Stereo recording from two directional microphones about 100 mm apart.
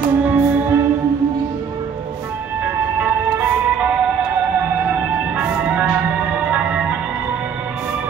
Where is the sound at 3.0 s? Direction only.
15° right (ahead or behind).